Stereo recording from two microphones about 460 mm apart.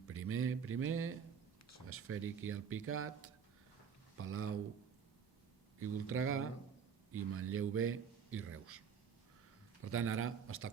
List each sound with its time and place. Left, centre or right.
0.1 s a man's voice: right
4.2 s a man's voice: right
5.8 s a man's voice: right
9.8 s a man's voice: right